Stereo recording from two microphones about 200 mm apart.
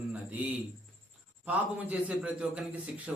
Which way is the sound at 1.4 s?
5° right (ahead or behind).